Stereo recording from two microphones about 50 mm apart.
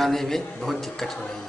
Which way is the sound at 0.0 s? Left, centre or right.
Centre.